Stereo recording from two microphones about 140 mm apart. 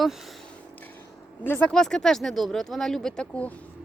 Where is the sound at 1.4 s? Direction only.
15° left (ahead or behind).